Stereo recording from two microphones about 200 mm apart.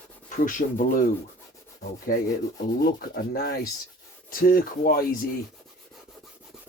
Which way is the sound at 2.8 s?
50° left (ahead or behind).